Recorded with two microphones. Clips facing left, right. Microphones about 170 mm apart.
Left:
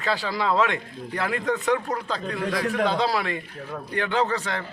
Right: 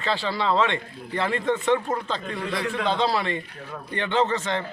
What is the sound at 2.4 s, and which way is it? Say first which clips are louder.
Speech: left 3 dB; 40° left (ahead or behind).